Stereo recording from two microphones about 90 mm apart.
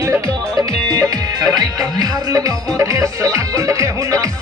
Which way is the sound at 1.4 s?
45° right (ahead or behind).